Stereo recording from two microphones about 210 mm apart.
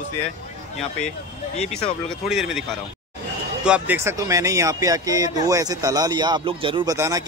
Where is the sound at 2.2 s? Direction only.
Centre (ahead or behind).